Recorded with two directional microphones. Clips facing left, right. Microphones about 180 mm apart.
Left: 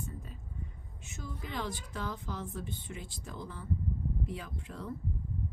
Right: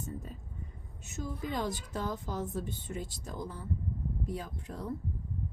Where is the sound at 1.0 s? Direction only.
40° right (ahead or behind).